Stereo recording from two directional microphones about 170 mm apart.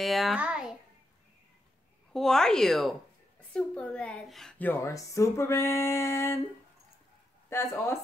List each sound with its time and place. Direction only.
0.0 s a child's voice: centre (ahead or behind)
2.1 s a woman's voice: centre (ahead or behind)
7.4 s speech: 15° left (ahead or behind)